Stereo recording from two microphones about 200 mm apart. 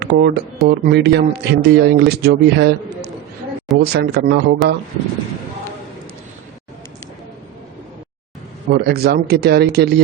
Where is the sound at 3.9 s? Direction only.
60° right (ahead or behind).